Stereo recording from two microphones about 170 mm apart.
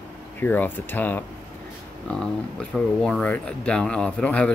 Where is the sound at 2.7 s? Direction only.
5° left (ahead or behind).